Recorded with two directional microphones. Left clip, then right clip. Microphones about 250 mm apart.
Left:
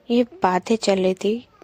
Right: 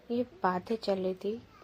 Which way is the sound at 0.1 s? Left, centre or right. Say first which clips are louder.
Left 12 dB; left.